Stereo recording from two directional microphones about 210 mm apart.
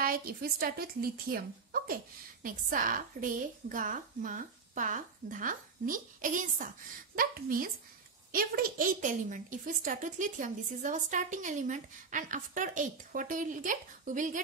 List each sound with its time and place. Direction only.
0.0 s a woman's voice: 45° right (ahead or behind)